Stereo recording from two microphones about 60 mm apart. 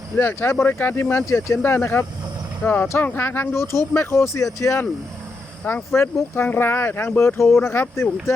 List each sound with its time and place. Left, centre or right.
0.2 s speech: left
5.9 s speech: left